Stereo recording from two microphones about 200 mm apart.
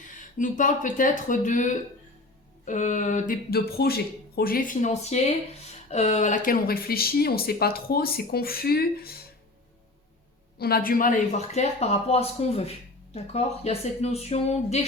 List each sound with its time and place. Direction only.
0.0 s speech: 40° left (ahead or behind)
10.6 s speech: 50° left (ahead or behind); by 14.8 s 30° left (ahead or behind)